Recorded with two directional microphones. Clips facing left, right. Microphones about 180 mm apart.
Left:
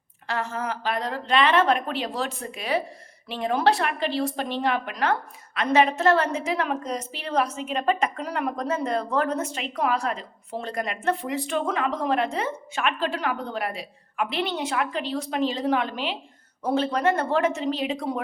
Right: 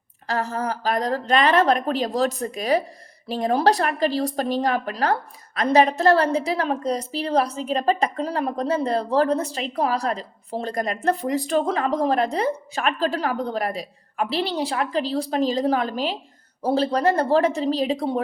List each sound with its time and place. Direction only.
0.3 s a woman's voice: 40° right (ahead or behind)